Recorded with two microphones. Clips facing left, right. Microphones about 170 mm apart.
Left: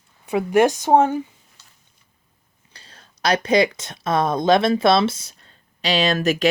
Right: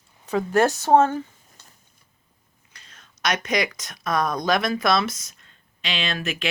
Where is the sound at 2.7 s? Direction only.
30° left (ahead or behind).